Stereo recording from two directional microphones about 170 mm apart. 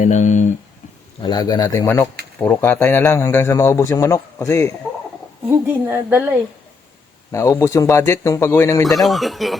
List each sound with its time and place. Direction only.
0.0 s speech: 45° left (ahead or behind)
1.2 s a man's voice: 25° left (ahead or behind)
5.5 s a woman's voice: 15° right (ahead or behind)
7.3 s a man's voice: 20° left (ahead or behind)
8.9 s speech: centre (ahead or behind)